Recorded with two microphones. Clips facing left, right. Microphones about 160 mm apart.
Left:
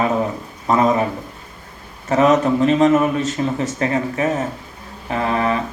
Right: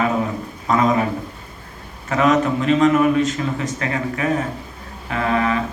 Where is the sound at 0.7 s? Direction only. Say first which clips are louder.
Left 1 dB; 30° left (ahead or behind).